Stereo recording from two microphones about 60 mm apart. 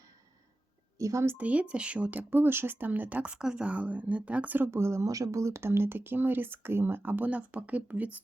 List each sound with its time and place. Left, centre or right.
0.9 s speech: right
1.4 s speech: right
3.3 s speech: centre; by 4.7 s right
4.7 s speech: right
5.0 s speech: right